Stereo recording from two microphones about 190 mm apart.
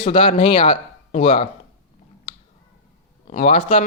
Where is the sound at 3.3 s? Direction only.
35° left (ahead or behind).